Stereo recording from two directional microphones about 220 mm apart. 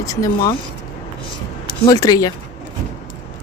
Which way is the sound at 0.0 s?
15° left (ahead or behind).